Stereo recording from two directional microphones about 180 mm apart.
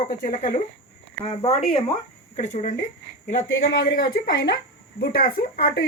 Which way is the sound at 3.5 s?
90° left.